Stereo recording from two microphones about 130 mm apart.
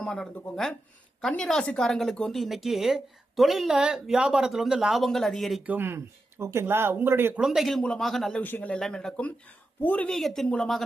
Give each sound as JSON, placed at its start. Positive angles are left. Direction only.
{"t": 0.0, "sound": "speech", "side_deg": 5}
{"t": 5.7, "sound": "speech", "side_deg": -20}
{"t": 7.4, "sound": "speech", "side_deg": 0}
{"t": 8.4, "sound": "speech", "side_deg": 15}